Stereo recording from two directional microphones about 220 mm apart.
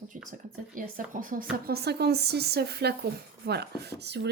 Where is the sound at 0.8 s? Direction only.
40° right (ahead or behind).